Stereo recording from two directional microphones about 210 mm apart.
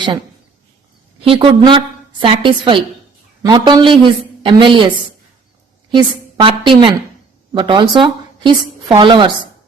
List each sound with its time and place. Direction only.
1.2 s a woman's voice: 25° right (ahead or behind)